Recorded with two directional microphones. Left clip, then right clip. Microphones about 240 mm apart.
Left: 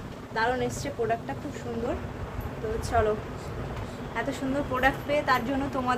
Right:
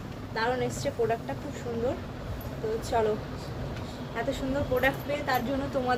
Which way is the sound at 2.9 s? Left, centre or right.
Centre.